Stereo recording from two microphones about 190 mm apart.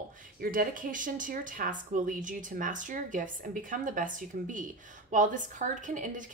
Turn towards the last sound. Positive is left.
turn(degrees=-40)  # may be behind; listen again after turning